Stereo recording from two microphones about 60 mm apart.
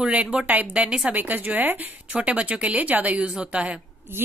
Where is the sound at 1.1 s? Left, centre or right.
Right.